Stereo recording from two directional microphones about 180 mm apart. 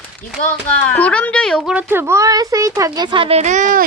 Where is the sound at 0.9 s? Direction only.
5° left (ahead or behind).